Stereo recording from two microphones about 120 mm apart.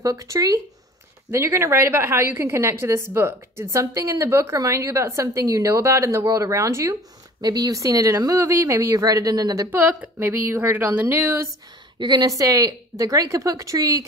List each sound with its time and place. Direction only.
0.0 s a woman's voice: 30° right (ahead or behind)
9.7 s speech: 15° right (ahead or behind)
12.0 s a woman's voice: 35° right (ahead or behind)